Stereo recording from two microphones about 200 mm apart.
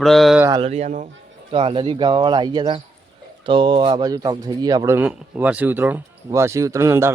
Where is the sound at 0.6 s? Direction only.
35° right (ahead or behind).